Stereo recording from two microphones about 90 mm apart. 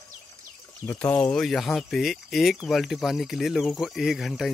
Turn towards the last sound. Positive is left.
turn(degrees=-5)  # may be behind; listen again after turning